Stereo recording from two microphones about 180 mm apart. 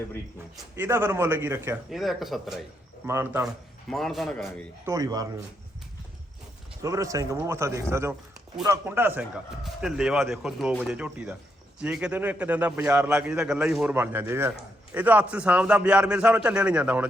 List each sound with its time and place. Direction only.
0.8 s a man's voice: 10° right (ahead or behind)
1.9 s speech: centre (ahead or behind)
3.1 s a man's voice: 15° right (ahead or behind)
3.4 s speech: centre (ahead or behind)
4.9 s speech: 20° right (ahead or behind)
6.8 s a man's voice: 15° right (ahead or behind)